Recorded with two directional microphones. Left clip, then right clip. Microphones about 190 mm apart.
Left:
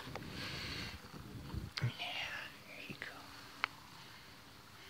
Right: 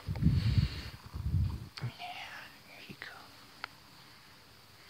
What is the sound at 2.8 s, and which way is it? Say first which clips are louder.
Whispering: right 1 dB; 10° right (ahead or behind).